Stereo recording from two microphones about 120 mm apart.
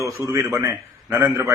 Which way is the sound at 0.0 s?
25° right (ahead or behind).